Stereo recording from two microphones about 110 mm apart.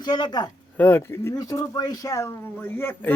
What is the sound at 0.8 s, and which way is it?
Speech, 20° left (ahead or behind).